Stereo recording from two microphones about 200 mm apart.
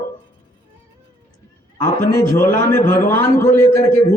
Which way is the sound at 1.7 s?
15° left (ahead or behind).